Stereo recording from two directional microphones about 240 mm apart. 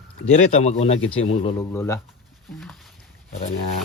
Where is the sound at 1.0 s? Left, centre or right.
Left.